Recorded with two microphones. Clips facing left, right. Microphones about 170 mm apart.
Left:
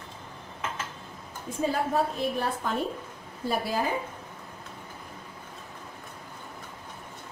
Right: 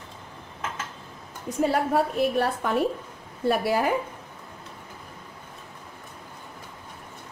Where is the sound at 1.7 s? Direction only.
70° right (ahead or behind).